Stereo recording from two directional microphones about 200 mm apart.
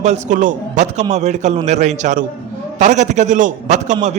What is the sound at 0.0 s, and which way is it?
A man's voice, 35° right (ahead or behind).